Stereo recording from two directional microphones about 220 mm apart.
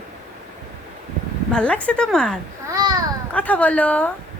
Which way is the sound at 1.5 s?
5° left (ahead or behind).